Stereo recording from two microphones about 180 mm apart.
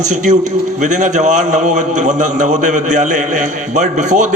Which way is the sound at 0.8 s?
45° right (ahead or behind).